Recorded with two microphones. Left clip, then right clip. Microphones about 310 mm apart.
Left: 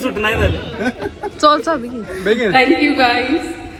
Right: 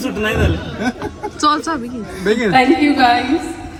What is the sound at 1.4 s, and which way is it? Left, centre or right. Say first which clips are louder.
Speech: left 4 dB; centre.